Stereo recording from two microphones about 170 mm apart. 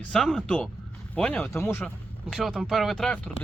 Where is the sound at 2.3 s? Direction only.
Centre (ahead or behind).